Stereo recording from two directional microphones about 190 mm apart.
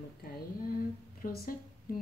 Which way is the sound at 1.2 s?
50° left (ahead or behind).